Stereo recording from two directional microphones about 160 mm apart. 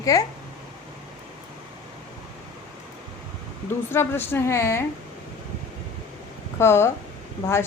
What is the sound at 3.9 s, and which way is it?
Speech, 15° left (ahead or behind).